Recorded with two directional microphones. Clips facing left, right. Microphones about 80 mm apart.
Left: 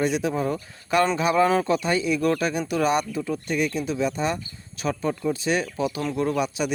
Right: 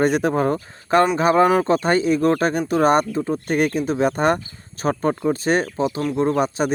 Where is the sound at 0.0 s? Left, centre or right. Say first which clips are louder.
Right 6 dB; right.